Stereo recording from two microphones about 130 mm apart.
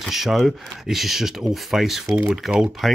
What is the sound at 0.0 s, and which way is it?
Speech, centre (ahead or behind).